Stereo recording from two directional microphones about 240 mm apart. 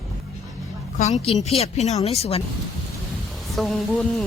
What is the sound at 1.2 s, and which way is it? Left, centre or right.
Speech, left.